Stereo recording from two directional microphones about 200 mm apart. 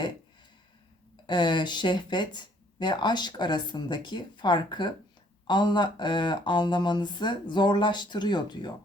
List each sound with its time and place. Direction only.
1.3 s speech: 20° left (ahead or behind)